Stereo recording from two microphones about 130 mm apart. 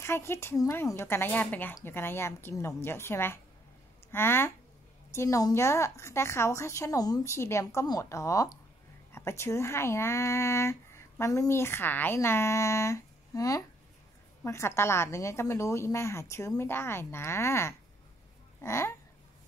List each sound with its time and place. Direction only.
0.0 s speech: 20° left (ahead or behind)
7.6 s speech: 30° left (ahead or behind)